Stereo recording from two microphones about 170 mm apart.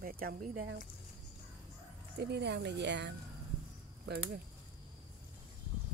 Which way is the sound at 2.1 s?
75° right (ahead or behind).